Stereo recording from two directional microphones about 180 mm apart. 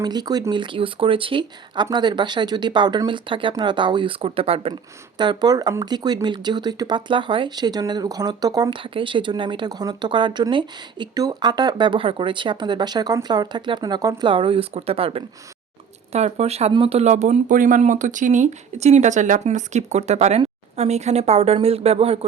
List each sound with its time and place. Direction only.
0.0 s speech: 20° right (ahead or behind)